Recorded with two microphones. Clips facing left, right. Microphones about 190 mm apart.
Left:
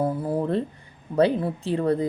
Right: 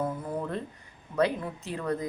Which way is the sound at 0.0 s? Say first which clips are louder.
Left 7 dB; 30° left (ahead or behind).